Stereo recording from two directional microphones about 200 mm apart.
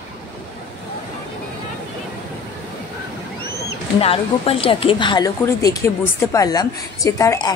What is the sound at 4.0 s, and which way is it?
A woman's voice, 30° left (ahead or behind).